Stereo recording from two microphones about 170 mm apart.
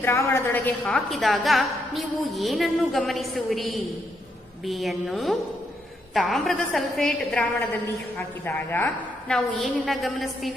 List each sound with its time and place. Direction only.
0.0 s a woman's voice: 15° left (ahead or behind)